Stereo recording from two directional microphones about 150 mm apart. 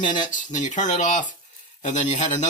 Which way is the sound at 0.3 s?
55° left (ahead or behind).